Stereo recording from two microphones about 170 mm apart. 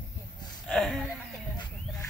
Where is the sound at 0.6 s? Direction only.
5° left (ahead or behind).